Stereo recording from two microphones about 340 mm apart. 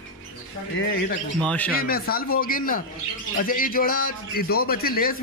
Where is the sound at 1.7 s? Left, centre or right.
Left.